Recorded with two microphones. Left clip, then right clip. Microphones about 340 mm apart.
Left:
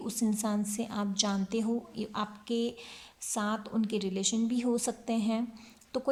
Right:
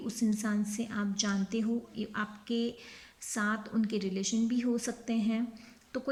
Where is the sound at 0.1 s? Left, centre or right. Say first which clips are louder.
Left 1 dB; centre.